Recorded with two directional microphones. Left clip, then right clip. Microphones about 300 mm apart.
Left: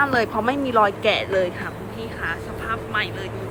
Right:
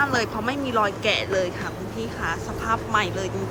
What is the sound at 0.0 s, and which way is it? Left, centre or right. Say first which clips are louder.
Speech: left 3 dB; centre.